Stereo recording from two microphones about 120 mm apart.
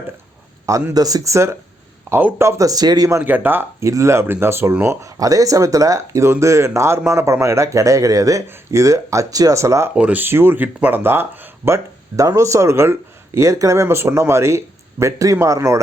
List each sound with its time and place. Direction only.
0.6 s speech: 25° right (ahead or behind)
3.2 s speech: 15° right (ahead or behind)
9.9 s speech: 10° right (ahead or behind)